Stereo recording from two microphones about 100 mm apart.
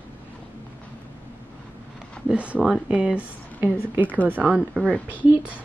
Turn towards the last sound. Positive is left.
turn(degrees=-15)  # may be behind; listen again after turning